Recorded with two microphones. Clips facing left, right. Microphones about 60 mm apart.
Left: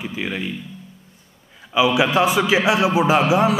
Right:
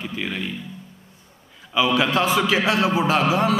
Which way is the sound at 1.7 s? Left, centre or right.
Centre.